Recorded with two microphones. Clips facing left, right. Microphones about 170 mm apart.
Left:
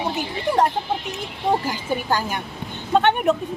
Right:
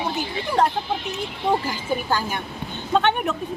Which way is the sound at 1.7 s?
15° left (ahead or behind).